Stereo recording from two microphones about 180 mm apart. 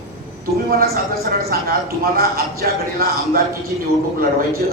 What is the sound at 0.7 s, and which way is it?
A man's voice, 55° right (ahead or behind).